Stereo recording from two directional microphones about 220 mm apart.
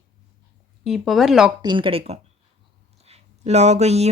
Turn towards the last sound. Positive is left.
turn(degrees=-30)  # may be behind; listen again after turning